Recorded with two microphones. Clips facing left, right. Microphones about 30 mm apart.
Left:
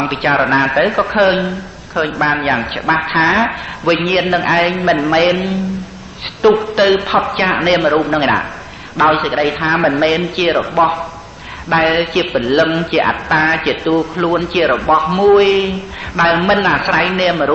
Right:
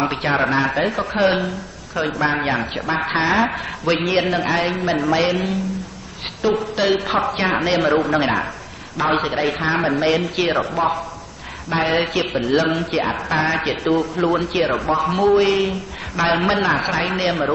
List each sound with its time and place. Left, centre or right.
0.0 s a man's voice: left
7.8 s a man's voice: centre; by 13.2 s left
13.3 s a man's voice: left